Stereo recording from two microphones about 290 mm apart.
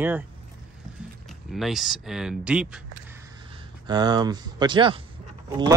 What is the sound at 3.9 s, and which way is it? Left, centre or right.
Speech, centre.